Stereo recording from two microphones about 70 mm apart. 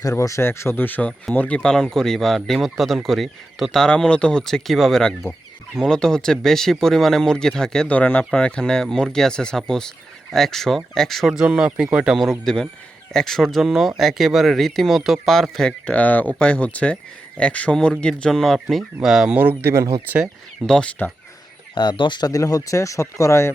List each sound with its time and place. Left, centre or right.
0.0 s speech: left; by 1.7 s centre
1.7 s speech: centre
7.9 s speech: centre
11.3 s speech: centre
12.1 s speech: centre
15.9 s speech: left
18.2 s speech: centre
19.3 s speech: right
20.7 s speech: centre
21.8 s speech: left
22.3 s speech: left